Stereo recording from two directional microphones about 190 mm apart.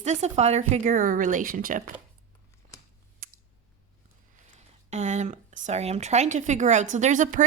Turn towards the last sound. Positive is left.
turn(degrees=-40)  # may be behind; listen again after turning